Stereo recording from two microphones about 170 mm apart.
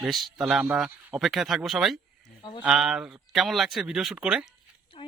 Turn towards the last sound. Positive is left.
turn(degrees=35)  # may be behind; listen again after turning